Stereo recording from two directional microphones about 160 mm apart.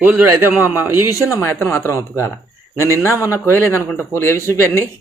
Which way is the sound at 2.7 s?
15° right (ahead or behind).